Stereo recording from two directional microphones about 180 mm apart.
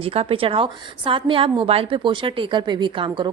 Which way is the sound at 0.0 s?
30° right (ahead or behind).